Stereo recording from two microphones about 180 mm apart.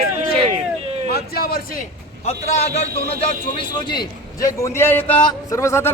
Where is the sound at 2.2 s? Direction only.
40° left (ahead or behind).